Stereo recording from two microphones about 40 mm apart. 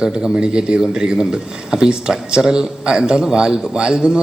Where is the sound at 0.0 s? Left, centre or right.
Centre.